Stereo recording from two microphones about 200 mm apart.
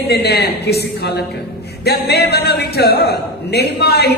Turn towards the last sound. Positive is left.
turn(degrees=55)  # may be behind; listen again after turning